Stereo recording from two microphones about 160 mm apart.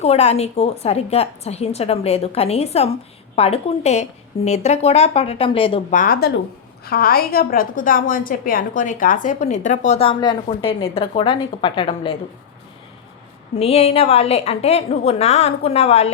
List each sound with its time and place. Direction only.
0.0 s a woman's voice: 40° left (ahead or behind)
5.9 s speech: 60° left (ahead or behind); by 6.4 s 80° left
6.8 s a woman's voice: 70° left (ahead or behind); by 10.1 s 45° left (ahead or behind)
10.1 s a woman's voice: 30° left (ahead or behind)
13.6 s a woman's voice: 40° left (ahead or behind)